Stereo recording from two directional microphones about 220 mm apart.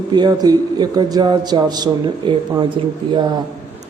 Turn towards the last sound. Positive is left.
turn(degrees=-20)  # may be behind; listen again after turning